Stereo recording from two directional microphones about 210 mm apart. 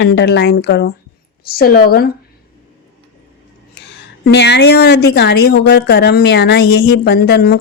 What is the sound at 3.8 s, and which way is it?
A woman's voice, 50° left (ahead or behind).